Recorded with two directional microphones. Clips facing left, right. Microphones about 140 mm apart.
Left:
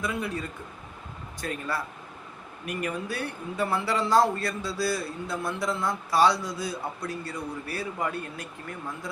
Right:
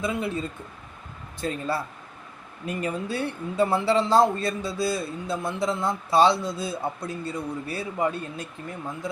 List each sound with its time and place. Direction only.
0.0 s speech: 25° right (ahead or behind)